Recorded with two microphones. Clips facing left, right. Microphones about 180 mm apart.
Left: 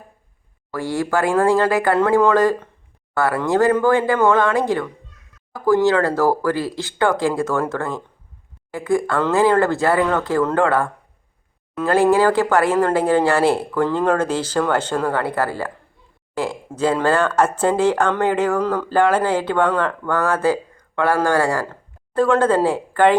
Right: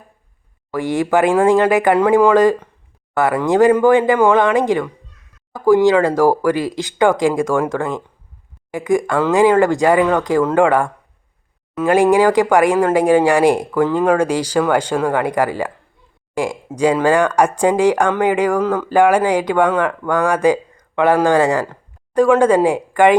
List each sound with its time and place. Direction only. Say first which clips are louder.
0.7 s speech: right 5 dB; 20° right (ahead or behind)